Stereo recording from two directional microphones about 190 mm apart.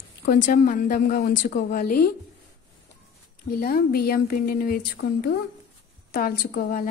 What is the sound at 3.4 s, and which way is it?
Speech, 50° left (ahead or behind).